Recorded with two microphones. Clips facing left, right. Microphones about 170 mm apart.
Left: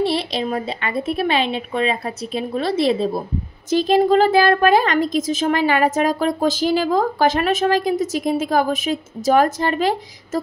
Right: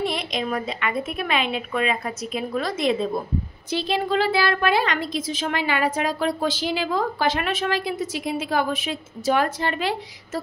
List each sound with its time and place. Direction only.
0.0 s speech: 30° left (ahead or behind)
3.7 s speech: 45° left (ahead or behind)